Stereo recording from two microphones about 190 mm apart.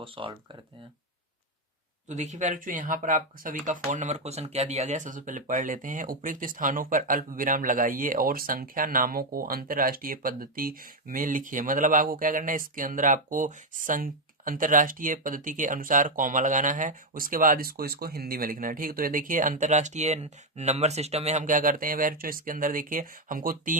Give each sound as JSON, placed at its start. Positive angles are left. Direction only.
{"t": 0.0, "sound": "speech", "side_deg": -25}
{"t": 2.0, "sound": "speech", "side_deg": -40}